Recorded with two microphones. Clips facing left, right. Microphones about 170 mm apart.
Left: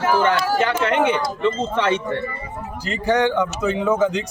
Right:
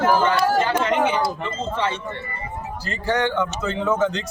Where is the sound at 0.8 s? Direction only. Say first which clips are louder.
Left 2 dB; 70° left (ahead or behind).